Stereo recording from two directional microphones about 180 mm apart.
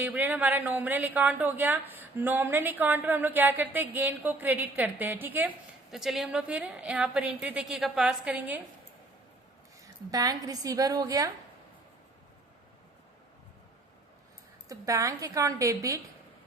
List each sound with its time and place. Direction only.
0.0 s a woman's voice: 10° right (ahead or behind)
9.8 s a woman's voice: 20° right (ahead or behind)
14.7 s a woman's voice: 15° right (ahead or behind)